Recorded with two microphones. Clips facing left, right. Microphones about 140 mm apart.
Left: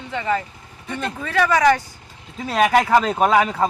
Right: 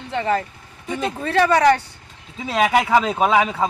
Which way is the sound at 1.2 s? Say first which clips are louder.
Right 1 dB; 30° right (ahead or behind).